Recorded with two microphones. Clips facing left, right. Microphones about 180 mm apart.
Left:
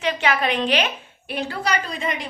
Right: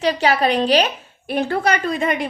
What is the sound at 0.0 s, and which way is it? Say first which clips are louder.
A woman's voice: right 5 dB; 35° right (ahead or behind).